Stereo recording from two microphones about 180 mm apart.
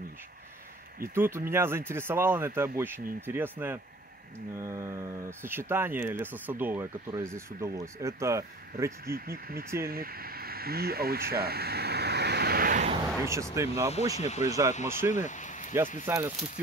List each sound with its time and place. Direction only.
1.1 s speech: 15° right (ahead or behind)
9.0 s speech: 55° right (ahead or behind)
13.2 s speech: 15° right (ahead or behind)
14.1 s speech: 40° left (ahead or behind)
16.1 s speech: 15° right (ahead or behind)